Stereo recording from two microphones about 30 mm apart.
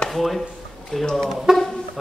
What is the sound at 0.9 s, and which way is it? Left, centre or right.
Speech, left.